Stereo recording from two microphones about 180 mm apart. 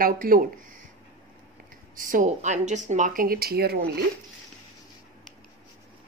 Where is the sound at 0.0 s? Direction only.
50° right (ahead or behind).